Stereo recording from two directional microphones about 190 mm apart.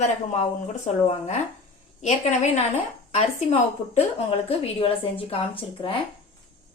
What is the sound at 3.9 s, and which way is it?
Speech, 30° left (ahead or behind).